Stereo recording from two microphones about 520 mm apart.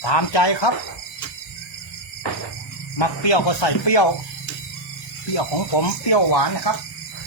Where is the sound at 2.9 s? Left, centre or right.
Left.